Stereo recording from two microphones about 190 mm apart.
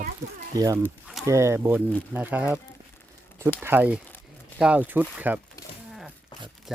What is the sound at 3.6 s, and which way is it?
Speech, 10° right (ahead or behind).